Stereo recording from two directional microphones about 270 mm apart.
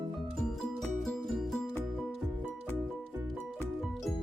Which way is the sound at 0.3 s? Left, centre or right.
Centre.